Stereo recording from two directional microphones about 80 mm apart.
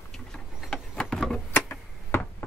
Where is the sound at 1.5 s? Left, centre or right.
Left.